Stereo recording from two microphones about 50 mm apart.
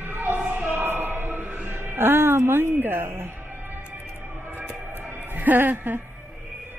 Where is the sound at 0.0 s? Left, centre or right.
Right.